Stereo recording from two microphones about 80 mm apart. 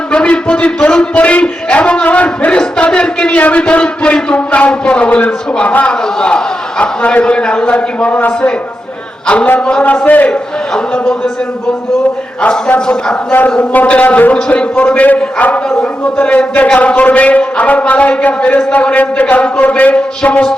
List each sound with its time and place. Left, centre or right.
0.1 s a man's voice: centre
12.4 s a man's voice: centre